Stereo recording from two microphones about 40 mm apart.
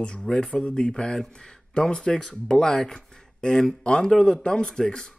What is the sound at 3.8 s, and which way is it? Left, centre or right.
Speech, left.